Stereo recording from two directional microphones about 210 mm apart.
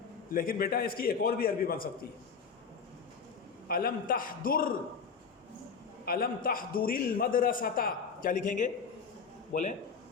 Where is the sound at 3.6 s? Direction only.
45° left (ahead or behind).